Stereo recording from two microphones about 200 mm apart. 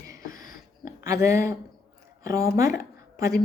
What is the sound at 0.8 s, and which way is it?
A woman's voice, 15° right (ahead or behind).